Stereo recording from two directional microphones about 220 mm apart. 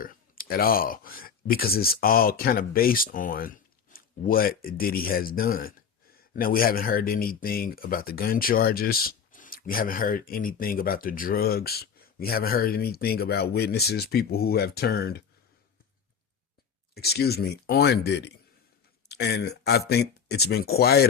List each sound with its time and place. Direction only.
0.0 s speech: 40° left (ahead or behind)
16.9 s speech: 45° left (ahead or behind)